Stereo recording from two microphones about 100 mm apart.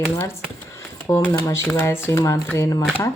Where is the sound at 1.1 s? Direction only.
35° left (ahead or behind).